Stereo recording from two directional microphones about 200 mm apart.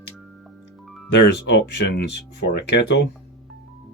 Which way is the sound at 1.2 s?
60° left (ahead or behind).